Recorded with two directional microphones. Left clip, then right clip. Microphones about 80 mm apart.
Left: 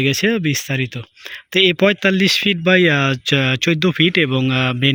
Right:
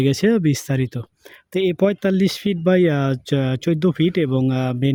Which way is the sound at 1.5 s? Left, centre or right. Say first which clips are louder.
Left 5 dB; right.